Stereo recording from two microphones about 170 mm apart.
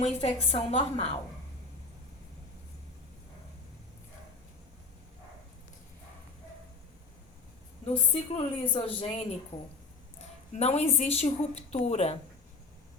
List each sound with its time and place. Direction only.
0.0 s a woman's voice: 40° left (ahead or behind)
7.9 s a woman's voice: 30° left (ahead or behind)
10.5 s a woman's voice: 40° left (ahead or behind)